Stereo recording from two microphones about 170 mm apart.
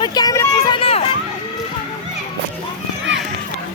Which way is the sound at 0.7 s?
35° left (ahead or behind).